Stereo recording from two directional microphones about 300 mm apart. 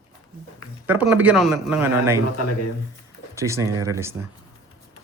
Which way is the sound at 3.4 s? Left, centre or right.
Centre.